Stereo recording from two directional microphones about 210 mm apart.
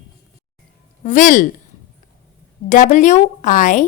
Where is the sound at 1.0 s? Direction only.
35° left (ahead or behind).